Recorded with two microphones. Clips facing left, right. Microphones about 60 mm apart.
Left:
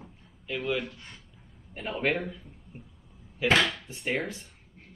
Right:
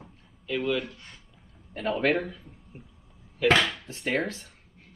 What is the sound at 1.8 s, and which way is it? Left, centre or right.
Speech, right.